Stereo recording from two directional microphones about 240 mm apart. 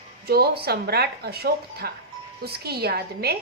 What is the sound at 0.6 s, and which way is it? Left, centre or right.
A woman's voice, right.